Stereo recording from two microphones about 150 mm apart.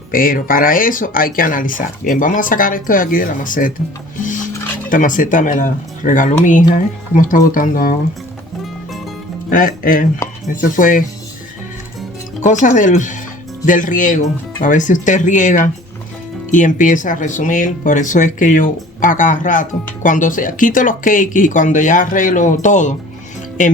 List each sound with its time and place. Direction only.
0.1 s speech: 70° left (ahead or behind)
4.9 s speech: 60° left (ahead or behind)
9.5 s speech: 60° left (ahead or behind)
12.4 s speech: 55° left (ahead or behind)